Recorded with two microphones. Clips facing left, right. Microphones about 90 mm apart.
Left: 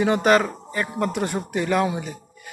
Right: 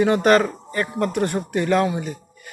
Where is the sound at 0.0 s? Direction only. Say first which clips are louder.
Right 2 dB; 15° left (ahead or behind).